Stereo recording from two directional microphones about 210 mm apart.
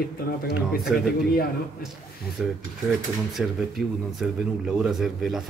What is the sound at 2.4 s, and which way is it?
Speech, centre (ahead or behind).